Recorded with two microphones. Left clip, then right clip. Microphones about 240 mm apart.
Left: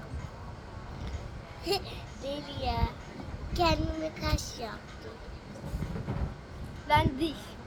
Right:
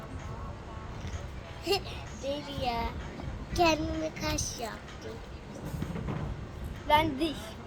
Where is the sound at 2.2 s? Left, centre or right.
Centre.